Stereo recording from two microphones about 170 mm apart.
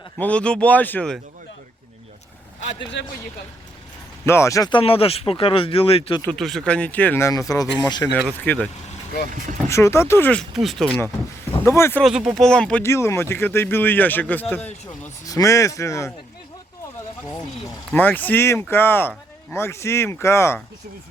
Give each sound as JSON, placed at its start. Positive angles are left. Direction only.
{"t": 0.2, "sound": "speech", "side_deg": 5}
{"t": 2.6, "sound": "speech", "side_deg": 90}
{"t": 4.3, "sound": "speech", "side_deg": 15}
{"t": 6.2, "sound": "speech", "side_deg": 0}
{"t": 8.1, "sound": "speech", "side_deg": 10}
{"t": 9.6, "sound": "speech", "side_deg": 15}
{"t": 10.5, "sound": "speech", "side_deg": 0}
{"t": 11.6, "sound": "speech", "side_deg": 15}
{"t": 12.0, "sound": "speech", "side_deg": -5}
{"t": 17.9, "sound": "speech", "side_deg": 10}